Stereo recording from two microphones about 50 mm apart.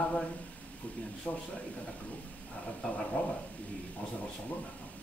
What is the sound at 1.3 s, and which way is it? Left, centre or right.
Speech, left.